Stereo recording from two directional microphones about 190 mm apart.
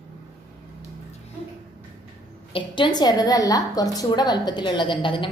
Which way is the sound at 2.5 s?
25° left (ahead or behind).